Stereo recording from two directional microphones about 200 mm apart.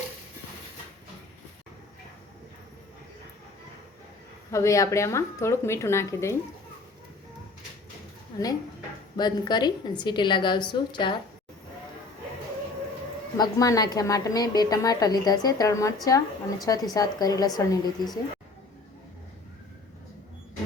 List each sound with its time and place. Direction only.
4.5 s a woman's voice: 15° left (ahead or behind)
8.3 s a woman's voice: 20° left (ahead or behind)
13.3 s a woman's voice: 15° left (ahead or behind)